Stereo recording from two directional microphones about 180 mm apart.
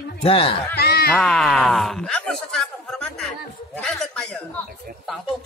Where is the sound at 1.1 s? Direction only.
Centre (ahead or behind).